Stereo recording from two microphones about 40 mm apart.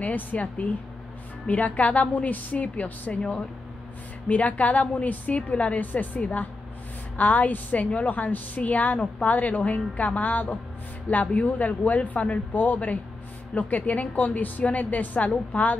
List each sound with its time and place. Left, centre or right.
0.0 s a woman's voice: left
4.3 s a woman's voice: left
5.8 s a woman's voice: left